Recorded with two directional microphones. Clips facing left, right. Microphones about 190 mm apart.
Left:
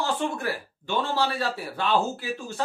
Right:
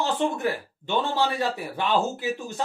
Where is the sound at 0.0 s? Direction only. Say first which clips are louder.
Right 3 dB; 20° right (ahead or behind).